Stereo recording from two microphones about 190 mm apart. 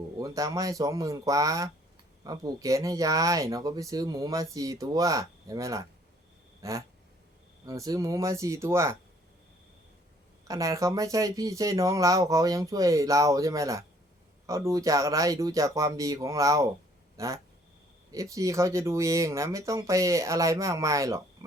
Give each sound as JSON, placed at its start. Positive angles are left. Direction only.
{"t": 0.2, "sound": "speech", "side_deg": -15}
{"t": 6.6, "sound": "a sound", "side_deg": -15}
{"t": 7.6, "sound": "speech", "side_deg": -20}
{"t": 10.5, "sound": "speech", "side_deg": -15}